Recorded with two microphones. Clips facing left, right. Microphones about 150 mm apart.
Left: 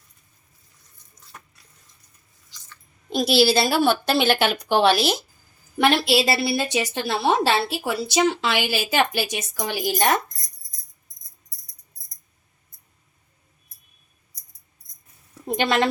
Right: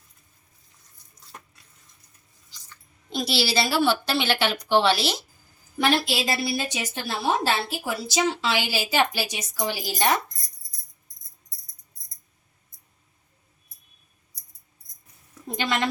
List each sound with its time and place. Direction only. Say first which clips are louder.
3.2 s a woman's voice: left 7 dB; 50° left (ahead or behind)
5.8 s a woman's voice: left 4 dB; 70° left (ahead or behind); by 10.2 s 55° left (ahead or behind)
15.5 s a woman's voice: left 5 dB; 60° left (ahead or behind)